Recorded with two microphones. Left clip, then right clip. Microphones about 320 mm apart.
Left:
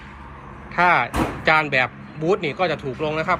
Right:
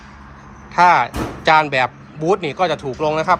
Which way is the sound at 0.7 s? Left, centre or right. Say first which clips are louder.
Right 5 dB; centre.